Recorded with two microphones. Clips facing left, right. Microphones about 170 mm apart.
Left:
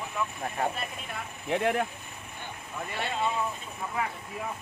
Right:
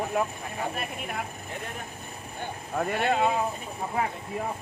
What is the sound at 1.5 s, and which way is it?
Speech, 75° left (ahead or behind).